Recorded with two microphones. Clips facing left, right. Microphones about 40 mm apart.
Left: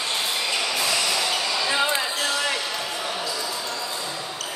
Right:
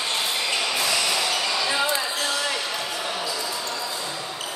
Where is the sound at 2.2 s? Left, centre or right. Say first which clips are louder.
Left 1 dB; left.